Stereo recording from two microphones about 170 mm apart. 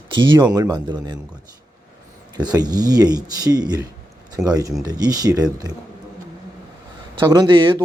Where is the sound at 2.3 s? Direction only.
25° right (ahead or behind).